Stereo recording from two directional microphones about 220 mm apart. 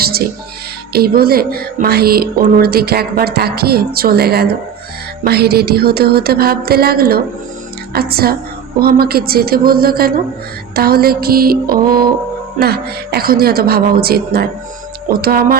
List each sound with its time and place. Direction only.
0.0 s music: 45° right (ahead or behind)
0.9 s speech: 45° right (ahead or behind)